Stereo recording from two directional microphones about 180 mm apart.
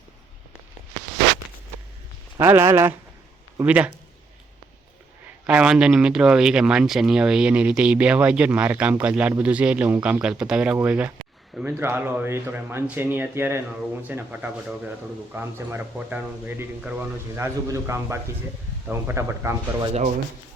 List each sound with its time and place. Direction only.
2.4 s speech: 15° right (ahead or behind)
5.5 s speech: 5° right (ahead or behind)